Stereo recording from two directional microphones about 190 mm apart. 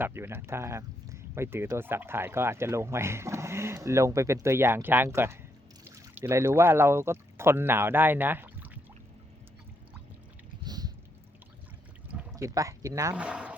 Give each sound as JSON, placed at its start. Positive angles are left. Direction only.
{"t": 0.0, "sound": "speech", "side_deg": -15}
{"t": 10.6, "sound": "a sound", "side_deg": -20}
{"t": 12.4, "sound": "speech", "side_deg": -15}
{"t": 13.2, "sound": "boat", "side_deg": -5}